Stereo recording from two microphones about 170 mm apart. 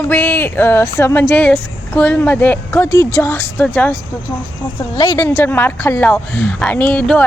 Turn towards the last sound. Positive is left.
turn(degrees=10)  # may be behind; listen again after turning